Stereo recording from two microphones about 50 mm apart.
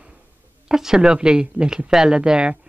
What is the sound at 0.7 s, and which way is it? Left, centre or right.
Speech, centre.